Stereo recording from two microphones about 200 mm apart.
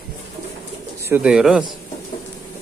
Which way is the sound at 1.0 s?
10° right (ahead or behind).